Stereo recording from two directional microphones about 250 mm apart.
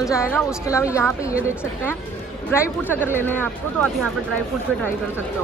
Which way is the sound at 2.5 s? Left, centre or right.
Centre.